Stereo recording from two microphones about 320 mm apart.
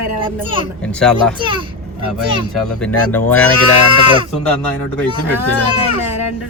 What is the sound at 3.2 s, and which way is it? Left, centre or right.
Speech, centre.